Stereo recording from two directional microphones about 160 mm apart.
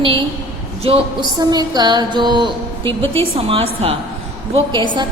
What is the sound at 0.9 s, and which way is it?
Speech, 40° right (ahead or behind).